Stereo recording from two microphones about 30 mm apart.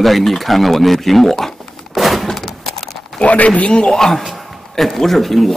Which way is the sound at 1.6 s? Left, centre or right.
Centre.